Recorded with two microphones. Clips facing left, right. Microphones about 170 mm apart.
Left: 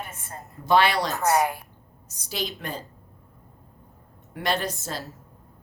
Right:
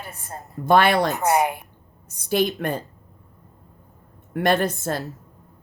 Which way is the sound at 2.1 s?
55° right (ahead or behind).